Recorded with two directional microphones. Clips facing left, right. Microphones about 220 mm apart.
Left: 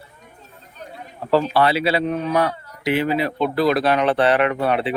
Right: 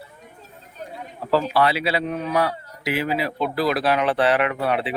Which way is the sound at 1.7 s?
Centre (ahead or behind).